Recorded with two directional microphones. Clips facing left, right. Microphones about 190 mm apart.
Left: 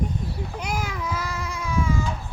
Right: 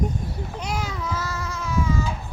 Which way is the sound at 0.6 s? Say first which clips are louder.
Even; 10° left (ahead or behind).